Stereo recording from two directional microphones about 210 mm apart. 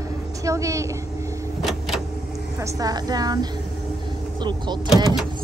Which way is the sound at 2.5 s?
15° right (ahead or behind).